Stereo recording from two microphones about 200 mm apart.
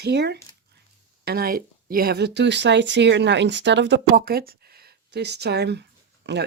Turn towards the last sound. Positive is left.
turn(degrees=-60)  # may be behind; listen again after turning